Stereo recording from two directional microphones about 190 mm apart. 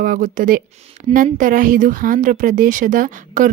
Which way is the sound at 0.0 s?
45° right (ahead or behind).